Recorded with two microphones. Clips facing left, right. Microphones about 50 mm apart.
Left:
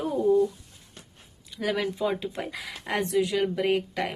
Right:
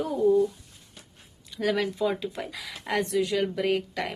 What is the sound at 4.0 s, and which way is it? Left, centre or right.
Speech, left.